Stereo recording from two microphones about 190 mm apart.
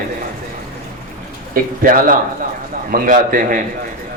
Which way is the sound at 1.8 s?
45° right (ahead or behind).